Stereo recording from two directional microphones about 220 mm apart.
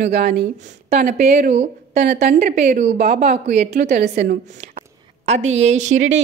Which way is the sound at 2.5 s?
30° right (ahead or behind).